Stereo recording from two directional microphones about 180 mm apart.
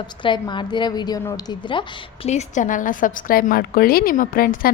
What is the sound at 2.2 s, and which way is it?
A woman's voice, 40° left (ahead or behind).